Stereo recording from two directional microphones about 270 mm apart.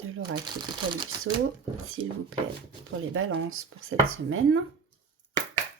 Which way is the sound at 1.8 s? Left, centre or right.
Right.